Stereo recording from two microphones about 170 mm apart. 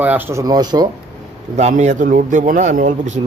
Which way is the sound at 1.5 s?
45° right (ahead or behind).